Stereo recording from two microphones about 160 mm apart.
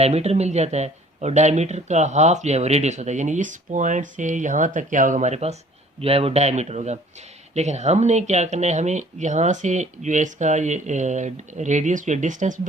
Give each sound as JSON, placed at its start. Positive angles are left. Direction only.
{"t": 0.0, "sound": "speech", "side_deg": -40}